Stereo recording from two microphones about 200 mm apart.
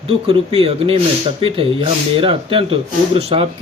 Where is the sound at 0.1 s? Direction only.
30° right (ahead or behind).